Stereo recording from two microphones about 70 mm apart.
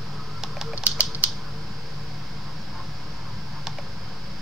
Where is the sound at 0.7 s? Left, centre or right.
Centre.